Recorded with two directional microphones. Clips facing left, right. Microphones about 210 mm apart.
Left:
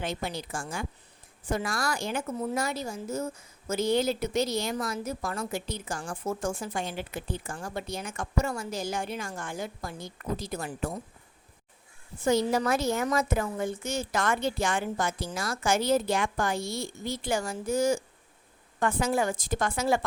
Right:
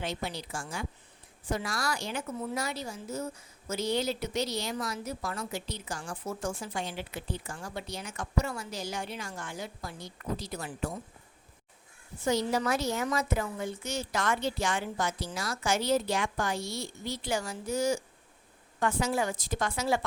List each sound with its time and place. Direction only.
0.0 s a woman's voice: 50° left (ahead or behind)
12.2 s a woman's voice: 50° left (ahead or behind)